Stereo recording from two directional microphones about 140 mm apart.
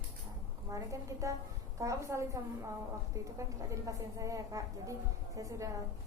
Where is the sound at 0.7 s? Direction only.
25° right (ahead or behind).